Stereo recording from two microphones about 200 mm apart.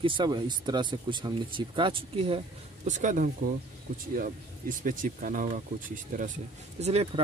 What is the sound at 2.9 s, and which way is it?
Speech, 40° right (ahead or behind).